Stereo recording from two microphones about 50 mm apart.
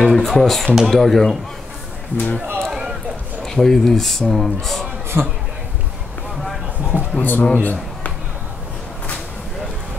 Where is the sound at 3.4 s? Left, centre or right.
Centre.